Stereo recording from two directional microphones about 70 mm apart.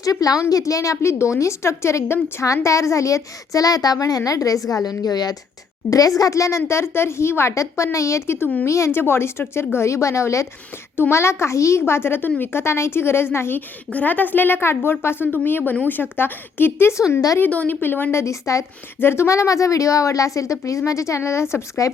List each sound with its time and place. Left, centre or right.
0.0 s a woman's voice: left
5.9 s a woman's voice: left
13.9 s a woman's voice: left
18.2 s a woman's voice: left
18.9 s a woman's voice: left